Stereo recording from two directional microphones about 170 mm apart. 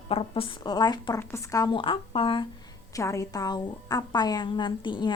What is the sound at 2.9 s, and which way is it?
A woman's voice, 20° left (ahead or behind).